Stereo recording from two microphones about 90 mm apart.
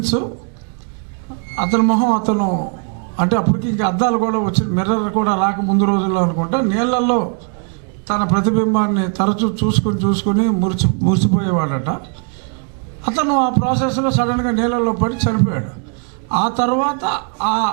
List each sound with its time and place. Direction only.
0.0 s a man's voice: 10° right (ahead or behind)
1.5 s a man's voice: 15° right (ahead or behind)
13.1 s a man's voice: 15° right (ahead or behind)